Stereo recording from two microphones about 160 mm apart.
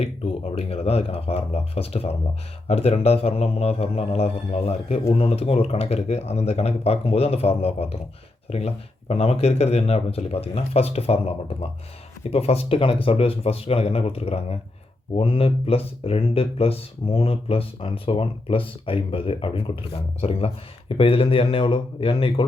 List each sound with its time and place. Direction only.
0.5 s speech: 40° left (ahead or behind)